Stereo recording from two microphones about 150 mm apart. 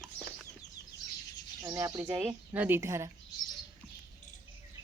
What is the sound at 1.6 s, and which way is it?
A woman's voice, 20° right (ahead or behind).